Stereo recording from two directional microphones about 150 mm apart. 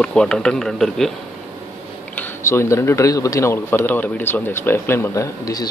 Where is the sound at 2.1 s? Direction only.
15° left (ahead or behind).